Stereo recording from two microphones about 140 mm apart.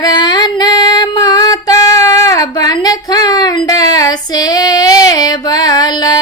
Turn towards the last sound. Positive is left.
turn(degrees=30)  # may be behind; listen again after turning